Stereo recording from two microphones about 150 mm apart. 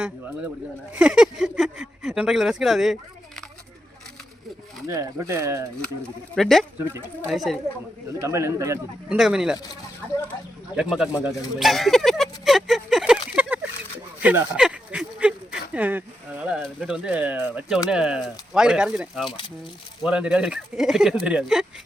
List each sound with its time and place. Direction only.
0.9 s speech: 5° right (ahead or behind)
4.9 s speech: 20° right (ahead or behind)
6.0 s speech: centre (ahead or behind)
8.2 s speech: 20° right (ahead or behind)
9.0 s speech: 5° right (ahead or behind)
10.8 s speech: 5° right (ahead or behind)